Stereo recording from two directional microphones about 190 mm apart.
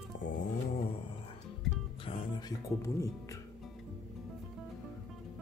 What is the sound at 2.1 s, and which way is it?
Music, 20° left (ahead or behind).